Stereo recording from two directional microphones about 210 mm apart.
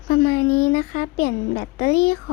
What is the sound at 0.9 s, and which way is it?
Speech, 40° left (ahead or behind).